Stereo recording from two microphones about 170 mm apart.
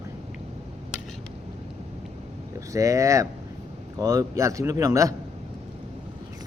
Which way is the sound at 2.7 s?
20° right (ahead or behind).